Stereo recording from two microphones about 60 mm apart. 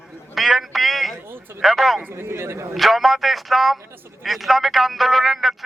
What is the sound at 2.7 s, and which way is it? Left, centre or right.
Speech, centre.